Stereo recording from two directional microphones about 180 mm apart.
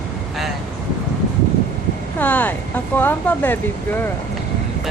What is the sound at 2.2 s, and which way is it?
Speech, 10° left (ahead or behind).